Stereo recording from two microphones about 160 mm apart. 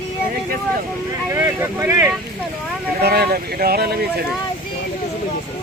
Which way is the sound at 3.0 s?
80° right.